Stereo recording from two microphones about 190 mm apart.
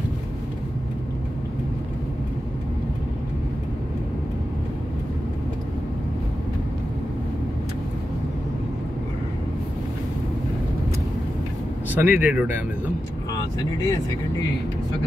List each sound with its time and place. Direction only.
11.9 s speech: 10° right (ahead or behind)
13.3 s speech: 20° left (ahead or behind)